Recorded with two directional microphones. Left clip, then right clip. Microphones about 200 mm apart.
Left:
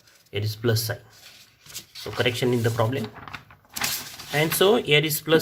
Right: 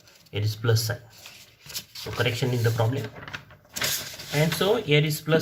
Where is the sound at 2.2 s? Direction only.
45° left (ahead or behind).